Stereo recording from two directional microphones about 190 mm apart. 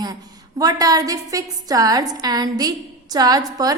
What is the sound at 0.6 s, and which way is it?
A woman's voice, 20° right (ahead or behind).